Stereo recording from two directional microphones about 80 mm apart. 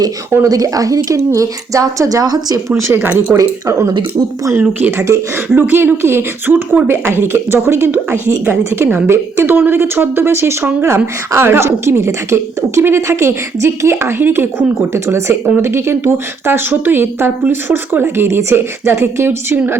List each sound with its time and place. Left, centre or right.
0.4 s a woman's voice: right
2.7 s a woman's voice: right
3.3 s a woman's voice: right